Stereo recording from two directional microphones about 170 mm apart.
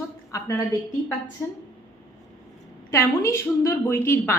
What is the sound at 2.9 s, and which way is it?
Speech, 15° left (ahead or behind).